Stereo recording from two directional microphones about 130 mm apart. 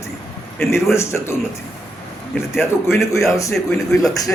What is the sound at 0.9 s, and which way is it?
Speech, 20° left (ahead or behind).